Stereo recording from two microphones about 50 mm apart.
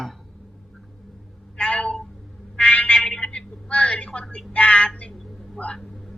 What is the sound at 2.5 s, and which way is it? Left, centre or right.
Frog, left.